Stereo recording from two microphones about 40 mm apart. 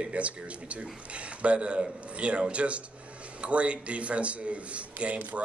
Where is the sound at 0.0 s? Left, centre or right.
Right.